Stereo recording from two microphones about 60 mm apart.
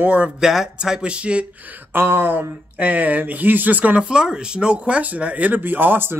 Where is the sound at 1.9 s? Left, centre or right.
Right.